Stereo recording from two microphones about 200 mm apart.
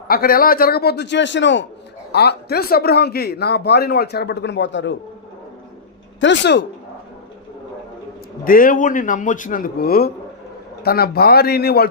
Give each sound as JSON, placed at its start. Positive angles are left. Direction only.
{"t": 0.1, "sound": "speech", "side_deg": 45}
{"t": 2.1, "sound": "speech", "side_deg": 50}
{"t": 6.1, "sound": "speech", "side_deg": 65}
{"t": 8.4, "sound": "speech", "side_deg": 45}